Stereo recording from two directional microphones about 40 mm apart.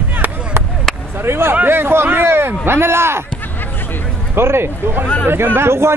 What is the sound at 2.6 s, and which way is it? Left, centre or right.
Speech, right.